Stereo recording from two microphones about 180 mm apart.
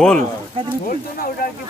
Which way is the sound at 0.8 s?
55° left (ahead or behind).